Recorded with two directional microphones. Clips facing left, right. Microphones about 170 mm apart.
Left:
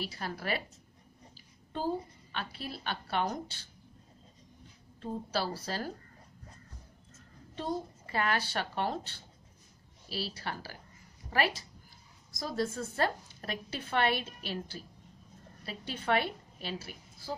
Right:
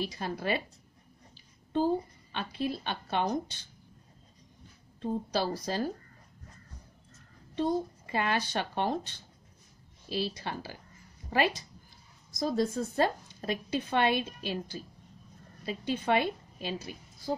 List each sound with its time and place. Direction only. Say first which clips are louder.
0.1 s speech: right 4 dB; 20° right (ahead or behind)
2.3 s speech: right 7 dB; 20° right (ahead or behind)
5.0 s a woman's voice: right 4 dB; 20° right (ahead or behind)
8.1 s a woman's voice: right 1 dB; 20° right (ahead or behind)